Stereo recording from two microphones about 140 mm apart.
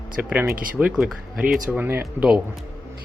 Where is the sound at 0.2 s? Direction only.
15° right (ahead or behind).